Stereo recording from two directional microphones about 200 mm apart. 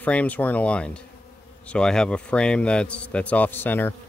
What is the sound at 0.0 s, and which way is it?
A man's voice, 5° left (ahead or behind).